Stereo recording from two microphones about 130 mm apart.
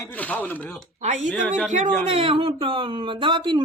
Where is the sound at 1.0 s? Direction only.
65° right (ahead or behind).